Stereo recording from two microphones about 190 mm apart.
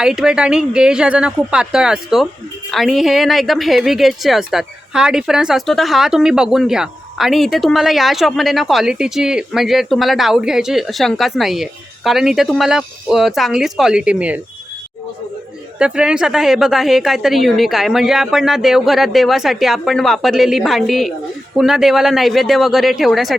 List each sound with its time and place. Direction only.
0.0 s a woman's voice: 5° right (ahead or behind)
15.8 s a woman's voice: 5° right (ahead or behind)